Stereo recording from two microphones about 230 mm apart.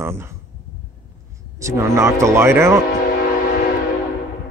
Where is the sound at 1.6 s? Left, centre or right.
Centre.